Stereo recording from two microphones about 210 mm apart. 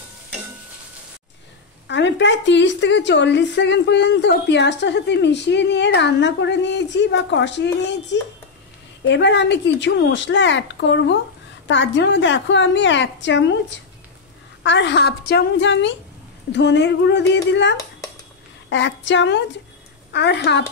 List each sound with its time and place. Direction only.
1.9 s a woman's voice: 60° left (ahead or behind)